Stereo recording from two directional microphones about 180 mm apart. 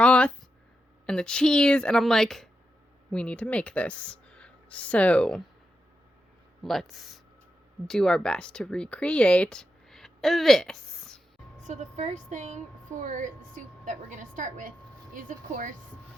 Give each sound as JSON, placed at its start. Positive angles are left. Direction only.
{"t": 0.0, "sound": "a sound", "side_deg": 5}
{"t": 1.0, "sound": "a woman's voice", "side_deg": 5}
{"t": 6.6, "sound": "a woman's voice", "side_deg": 0}
{"t": 11.6, "sound": "a woman's voice", "side_deg": -40}